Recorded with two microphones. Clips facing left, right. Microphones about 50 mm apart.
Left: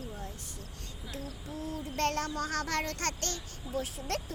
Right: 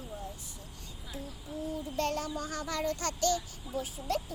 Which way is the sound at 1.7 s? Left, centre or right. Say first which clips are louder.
Left 2 dB; left.